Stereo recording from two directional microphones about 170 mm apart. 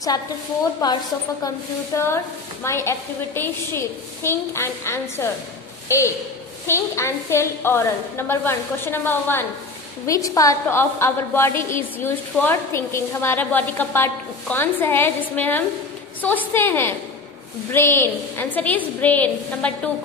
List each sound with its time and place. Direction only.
0.8 s a woman's voice: 25° left (ahead or behind)